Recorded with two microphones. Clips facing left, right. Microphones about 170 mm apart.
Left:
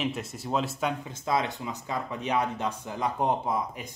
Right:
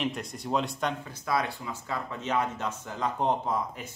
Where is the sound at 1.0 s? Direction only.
20° left (ahead or behind).